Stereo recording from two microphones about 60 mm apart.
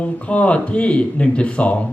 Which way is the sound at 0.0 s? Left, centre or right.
Left.